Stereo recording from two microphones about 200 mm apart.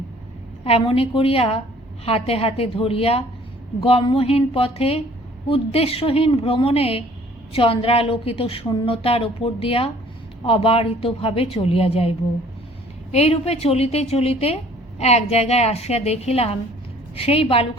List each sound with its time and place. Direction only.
0.6 s a woman's voice: 30° left (ahead or behind)